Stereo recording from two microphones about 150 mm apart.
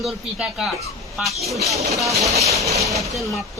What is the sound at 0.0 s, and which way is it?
Speech, 5° right (ahead or behind).